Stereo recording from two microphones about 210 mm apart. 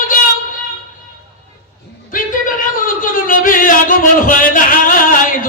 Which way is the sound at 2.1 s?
40° left (ahead or behind).